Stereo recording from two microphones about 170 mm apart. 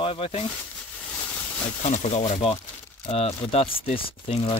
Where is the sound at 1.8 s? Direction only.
40° left (ahead or behind).